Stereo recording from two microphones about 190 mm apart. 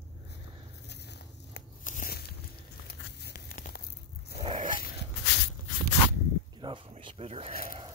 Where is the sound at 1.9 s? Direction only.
45° left (ahead or behind).